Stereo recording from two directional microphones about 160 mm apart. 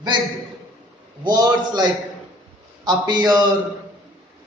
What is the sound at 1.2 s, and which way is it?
A man's voice, 25° right (ahead or behind).